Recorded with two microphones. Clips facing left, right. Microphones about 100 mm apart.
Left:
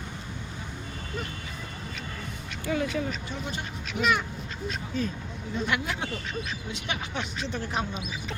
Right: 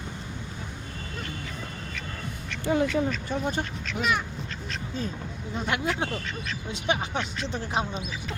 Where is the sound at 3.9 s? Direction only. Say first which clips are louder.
Left 3 dB; centre (ahead or behind).